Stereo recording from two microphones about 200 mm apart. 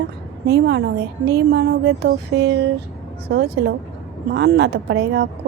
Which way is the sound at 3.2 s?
55° right (ahead or behind).